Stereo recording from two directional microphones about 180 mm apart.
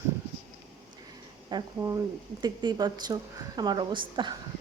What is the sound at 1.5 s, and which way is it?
Speech, 20° right (ahead or behind).